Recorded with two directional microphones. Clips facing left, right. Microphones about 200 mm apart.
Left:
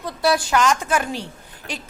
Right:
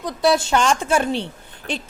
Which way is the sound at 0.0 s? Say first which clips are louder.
Right 2 dB; 20° right (ahead or behind).